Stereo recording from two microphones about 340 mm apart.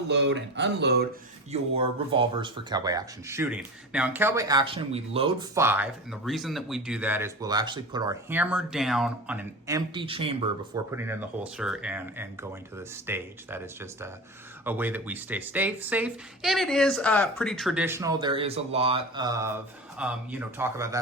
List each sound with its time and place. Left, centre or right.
0.1 s speech: right
1.7 s speech: centre